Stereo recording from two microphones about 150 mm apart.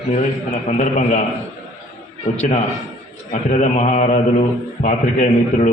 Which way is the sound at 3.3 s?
55° left (ahead or behind).